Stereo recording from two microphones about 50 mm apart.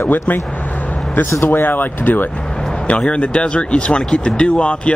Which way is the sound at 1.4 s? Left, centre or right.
Left.